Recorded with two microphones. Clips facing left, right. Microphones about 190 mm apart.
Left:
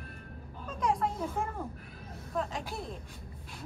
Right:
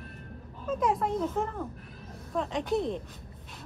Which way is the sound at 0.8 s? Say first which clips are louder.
Right 2 dB; centre (ahead or behind).